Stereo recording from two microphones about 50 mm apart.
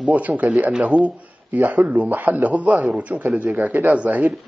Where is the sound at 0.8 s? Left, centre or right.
Centre.